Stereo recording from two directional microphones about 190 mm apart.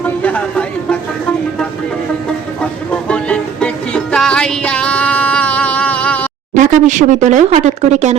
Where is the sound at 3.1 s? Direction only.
5° left (ahead or behind).